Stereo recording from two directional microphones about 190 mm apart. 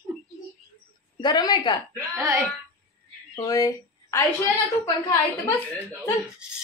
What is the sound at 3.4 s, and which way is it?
A woman's voice, 20° left (ahead or behind).